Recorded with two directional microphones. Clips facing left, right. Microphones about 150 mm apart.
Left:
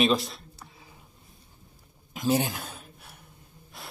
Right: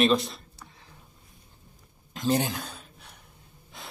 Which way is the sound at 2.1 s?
5° left (ahead or behind).